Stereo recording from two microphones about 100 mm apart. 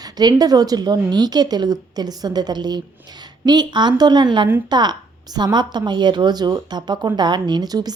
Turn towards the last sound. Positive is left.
turn(degrees=-40)  # may be behind; listen again after turning